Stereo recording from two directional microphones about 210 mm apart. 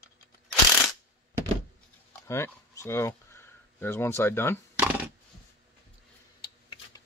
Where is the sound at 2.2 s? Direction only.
15° left (ahead or behind).